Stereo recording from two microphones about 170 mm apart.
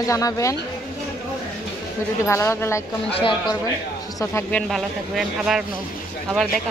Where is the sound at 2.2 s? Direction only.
15° left (ahead or behind).